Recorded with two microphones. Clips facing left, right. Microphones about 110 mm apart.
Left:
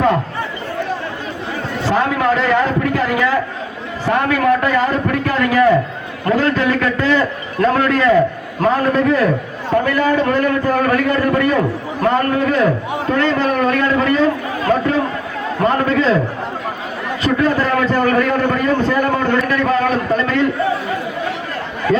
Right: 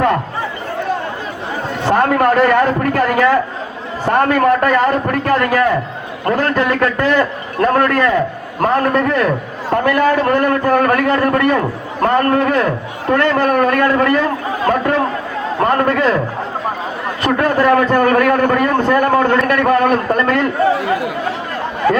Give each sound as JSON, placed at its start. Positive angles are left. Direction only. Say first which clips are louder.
{"t": 1.9, "sound": "a sound", "louder": "right 3 dB", "side_deg": -50}
{"t": 4.1, "sound": "a man's voice", "louder": "right 2 dB", "side_deg": -50}
{"t": 15.6, "sound": "a man's voice", "louder": "right 1 dB", "side_deg": -50}
{"t": 17.2, "sound": "a man's voice", "louder": "right 3 dB", "side_deg": -55}